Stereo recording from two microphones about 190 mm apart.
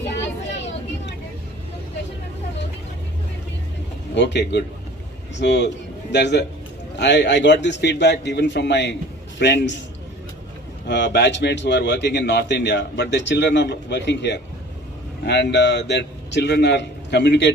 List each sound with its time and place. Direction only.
0.1 s vehicle: 70° left (ahead or behind)
4.1 s a man's voice: 65° left (ahead or behind)
10.9 s a man's voice: 65° left (ahead or behind)